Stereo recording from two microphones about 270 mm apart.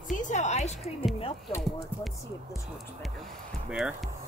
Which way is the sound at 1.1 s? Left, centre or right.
Centre.